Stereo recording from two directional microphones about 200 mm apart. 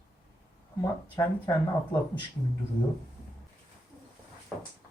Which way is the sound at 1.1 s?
20° left (ahead or behind).